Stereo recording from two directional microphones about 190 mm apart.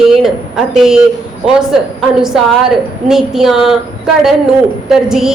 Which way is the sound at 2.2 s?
5° right (ahead or behind).